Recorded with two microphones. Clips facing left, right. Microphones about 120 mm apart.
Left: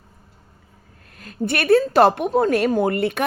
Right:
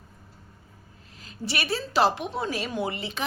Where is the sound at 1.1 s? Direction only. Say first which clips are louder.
Left 8 dB; 55° left (ahead or behind).